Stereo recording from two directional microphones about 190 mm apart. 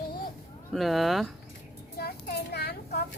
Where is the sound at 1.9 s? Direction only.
55° left (ahead or behind).